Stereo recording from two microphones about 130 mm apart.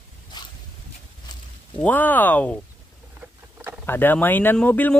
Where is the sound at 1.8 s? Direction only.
15° left (ahead or behind).